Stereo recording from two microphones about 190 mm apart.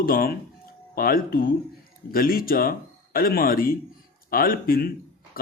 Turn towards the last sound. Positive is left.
turn(degrees=50)  # may be behind; listen again after turning